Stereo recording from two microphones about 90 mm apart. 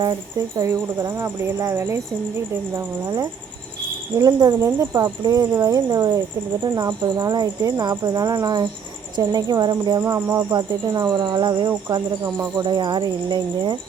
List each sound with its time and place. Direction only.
0.0 s speech: 45° right (ahead or behind)
10.0 s speech: 30° right (ahead or behind)
10.5 s speech: 50° right (ahead or behind)
12.2 s speech: 35° right (ahead or behind)
12.6 s speech: 50° right (ahead or behind)